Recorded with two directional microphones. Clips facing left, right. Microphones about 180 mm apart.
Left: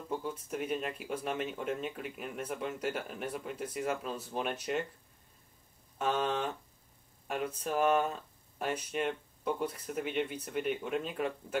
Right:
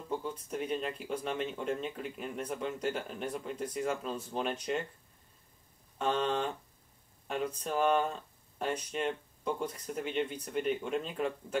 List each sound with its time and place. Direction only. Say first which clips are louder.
0.1 s speech: even; 5° left (ahead or behind)
5.9 s speech: right 1 dB; 5° left (ahead or behind)